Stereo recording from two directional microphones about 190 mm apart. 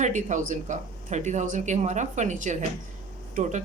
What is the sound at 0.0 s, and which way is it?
A woman's voice, 40° right (ahead or behind).